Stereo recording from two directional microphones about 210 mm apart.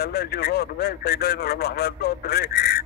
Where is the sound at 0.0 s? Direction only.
50° left (ahead or behind).